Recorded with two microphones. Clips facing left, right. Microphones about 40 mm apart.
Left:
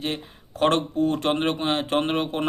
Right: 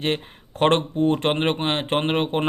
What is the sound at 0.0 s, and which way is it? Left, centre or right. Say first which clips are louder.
Speech: right 5 dB; right.